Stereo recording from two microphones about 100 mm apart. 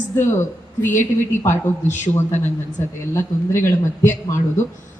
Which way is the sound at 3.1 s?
25° left (ahead or behind).